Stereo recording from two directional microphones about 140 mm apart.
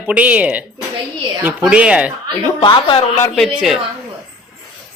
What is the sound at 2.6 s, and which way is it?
Speech, 35° left (ahead or behind).